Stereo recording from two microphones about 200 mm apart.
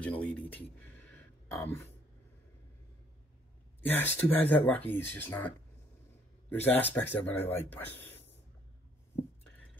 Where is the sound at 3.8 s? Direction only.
10° left (ahead or behind).